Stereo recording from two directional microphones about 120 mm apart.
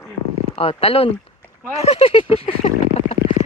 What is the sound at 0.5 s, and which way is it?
Speech, 55° left (ahead or behind).